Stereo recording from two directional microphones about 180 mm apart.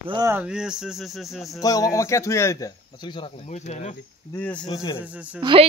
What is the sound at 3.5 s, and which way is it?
Speech, 40° left (ahead or behind).